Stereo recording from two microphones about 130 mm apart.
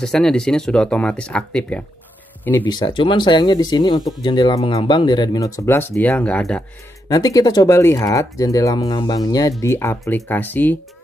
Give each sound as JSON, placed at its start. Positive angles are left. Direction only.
{"t": 0.0, "sound": "speech", "side_deg": 5}
{"t": 2.6, "sound": "speech", "side_deg": 35}
{"t": 7.1, "sound": "speech", "side_deg": 30}
{"t": 9.6, "sound": "speech", "side_deg": 20}